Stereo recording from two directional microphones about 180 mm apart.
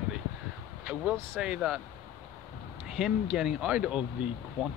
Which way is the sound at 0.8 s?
5° right (ahead or behind).